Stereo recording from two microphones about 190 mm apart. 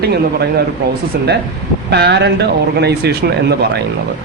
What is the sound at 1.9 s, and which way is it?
Speech, 60° right (ahead or behind).